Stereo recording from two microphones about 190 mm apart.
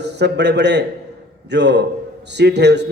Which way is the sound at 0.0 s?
60° right (ahead or behind).